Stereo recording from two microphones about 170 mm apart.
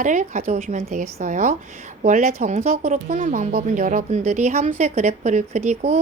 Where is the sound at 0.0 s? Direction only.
45° right (ahead or behind).